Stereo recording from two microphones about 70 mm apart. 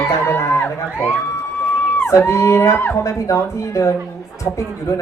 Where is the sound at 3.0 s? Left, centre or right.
Left.